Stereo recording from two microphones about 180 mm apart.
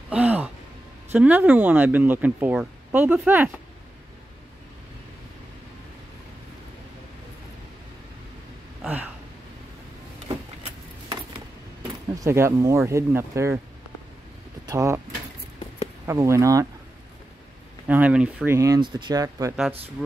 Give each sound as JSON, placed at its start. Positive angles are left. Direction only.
{"t": 0.1, "sound": "gasp", "side_deg": -5}
{"t": 1.1, "sound": "speech", "side_deg": -10}
{"t": 8.8, "sound": "a sound", "side_deg": -10}
{"t": 10.2, "sound": "keys jangling", "side_deg": -30}
{"t": 12.2, "sound": "speech", "side_deg": -15}
{"t": 14.7, "sound": "speech", "side_deg": -15}
{"t": 16.1, "sound": "speech", "side_deg": -15}
{"t": 17.8, "sound": "speech", "side_deg": -10}